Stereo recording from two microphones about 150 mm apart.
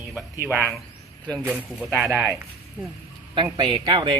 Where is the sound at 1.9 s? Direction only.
5° right (ahead or behind).